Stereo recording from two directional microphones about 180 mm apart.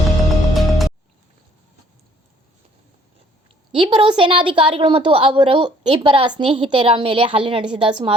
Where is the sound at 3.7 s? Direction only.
25° right (ahead or behind).